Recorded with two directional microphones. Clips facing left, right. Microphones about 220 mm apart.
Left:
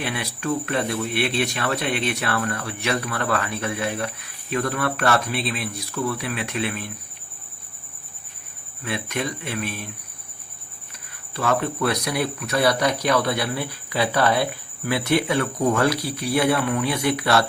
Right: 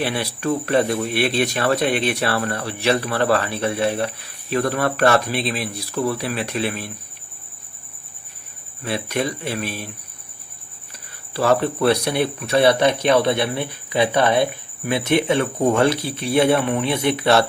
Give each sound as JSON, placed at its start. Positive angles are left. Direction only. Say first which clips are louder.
{"t": 0.0, "sound": "speech", "louder": "right 5 dB", "side_deg": -35}
{"t": 8.8, "sound": "speech", "louder": "right 4 dB", "side_deg": -35}
{"t": 11.3, "sound": "speech", "louder": "right 5 dB", "side_deg": -30}